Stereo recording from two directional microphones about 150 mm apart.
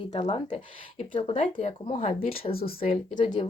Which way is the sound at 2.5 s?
90° left.